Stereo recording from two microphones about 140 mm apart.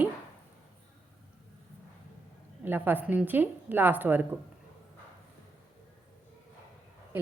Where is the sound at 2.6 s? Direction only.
15° right (ahead or behind).